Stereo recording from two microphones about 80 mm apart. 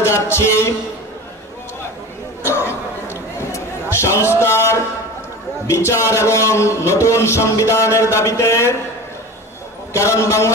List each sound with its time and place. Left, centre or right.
0.0 s a man's voice: left
2.4 s a sound: left
5.7 s a man's voice: left
9.9 s a man's voice: left